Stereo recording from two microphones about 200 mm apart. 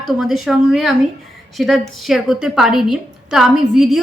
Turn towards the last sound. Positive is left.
turn(degrees=0)  # may be behind; listen again after turning